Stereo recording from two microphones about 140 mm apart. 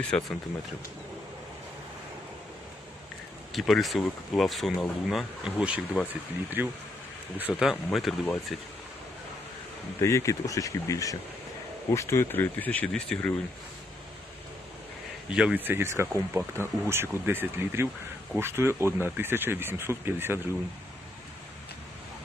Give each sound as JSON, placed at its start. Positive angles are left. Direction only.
{"t": 0.1, "sound": "speech", "side_deg": 5}
{"t": 3.5, "sound": "speech", "side_deg": 0}
{"t": 10.0, "sound": "speech", "side_deg": 20}
{"t": 15.3, "sound": "speech", "side_deg": -5}